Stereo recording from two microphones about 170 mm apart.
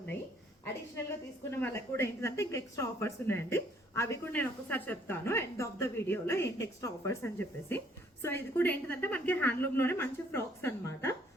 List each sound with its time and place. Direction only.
1.5 s speech: 15° left (ahead or behind)